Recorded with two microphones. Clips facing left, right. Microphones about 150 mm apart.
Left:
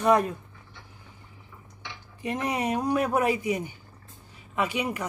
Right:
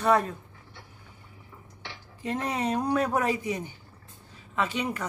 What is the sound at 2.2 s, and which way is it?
Speech, 15° left (ahead or behind).